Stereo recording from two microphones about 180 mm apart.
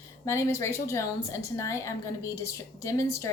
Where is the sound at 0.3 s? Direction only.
15° left (ahead or behind).